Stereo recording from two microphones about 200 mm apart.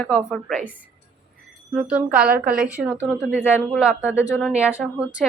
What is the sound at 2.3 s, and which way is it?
Speech, 45° right (ahead or behind).